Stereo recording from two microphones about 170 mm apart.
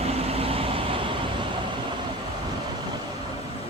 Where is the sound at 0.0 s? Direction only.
35° right (ahead or behind).